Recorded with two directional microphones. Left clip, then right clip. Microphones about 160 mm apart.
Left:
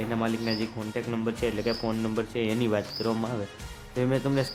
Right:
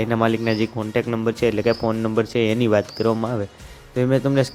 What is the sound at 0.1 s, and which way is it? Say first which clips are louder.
Speech: right 9 dB; 45° right (ahead or behind).